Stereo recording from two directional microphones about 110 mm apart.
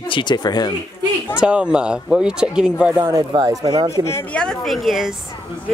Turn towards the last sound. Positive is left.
turn(degrees=0)  # may be behind; listen again after turning